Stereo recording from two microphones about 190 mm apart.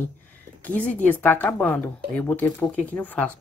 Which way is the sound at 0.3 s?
10° left (ahead or behind).